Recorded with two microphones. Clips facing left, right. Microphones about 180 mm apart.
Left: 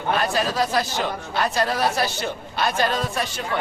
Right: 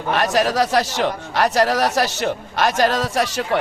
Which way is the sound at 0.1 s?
80° right.